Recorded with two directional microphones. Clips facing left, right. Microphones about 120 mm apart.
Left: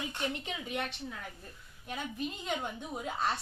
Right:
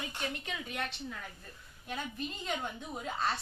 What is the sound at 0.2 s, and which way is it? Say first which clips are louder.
Speech: left 1 dB; 20° left (ahead or behind).